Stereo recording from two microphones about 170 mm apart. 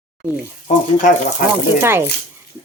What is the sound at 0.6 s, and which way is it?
Speech, 50° left (ahead or behind).